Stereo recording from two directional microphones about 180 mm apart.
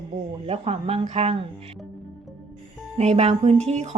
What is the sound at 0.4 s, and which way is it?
Speech, 35° right (ahead or behind).